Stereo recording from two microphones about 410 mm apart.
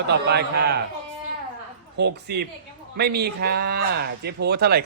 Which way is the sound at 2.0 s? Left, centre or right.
Right.